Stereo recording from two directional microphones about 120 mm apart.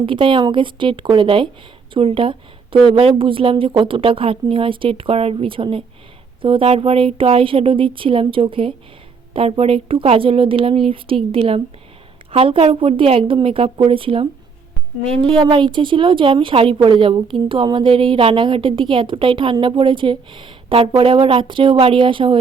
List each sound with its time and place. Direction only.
0.0 s a woman's voice: 45° right (ahead or behind)
15.3 s a woman's voice: 45° right (ahead or behind)